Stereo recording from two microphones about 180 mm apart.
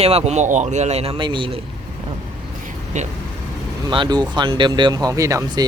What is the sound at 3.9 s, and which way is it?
Speech, 25° right (ahead or behind).